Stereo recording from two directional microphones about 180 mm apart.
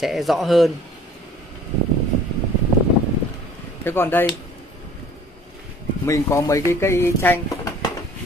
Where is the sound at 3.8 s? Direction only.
10° left (ahead or behind).